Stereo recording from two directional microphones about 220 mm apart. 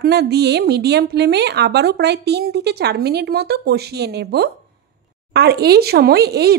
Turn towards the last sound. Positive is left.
turn(degrees=-45)  # may be behind; listen again after turning